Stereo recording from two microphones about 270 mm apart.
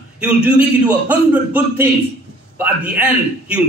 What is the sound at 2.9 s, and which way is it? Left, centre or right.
Speech, centre.